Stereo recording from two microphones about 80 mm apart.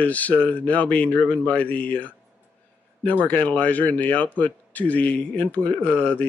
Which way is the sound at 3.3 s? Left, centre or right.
Centre.